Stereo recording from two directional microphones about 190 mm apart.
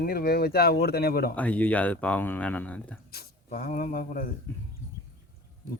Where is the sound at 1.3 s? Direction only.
10° left (ahead or behind).